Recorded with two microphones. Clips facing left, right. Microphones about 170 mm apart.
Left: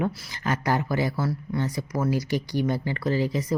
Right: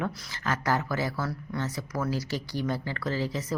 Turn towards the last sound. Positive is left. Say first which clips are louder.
# left 5 dB
turn(degrees=15)  # may be behind; listen again after turning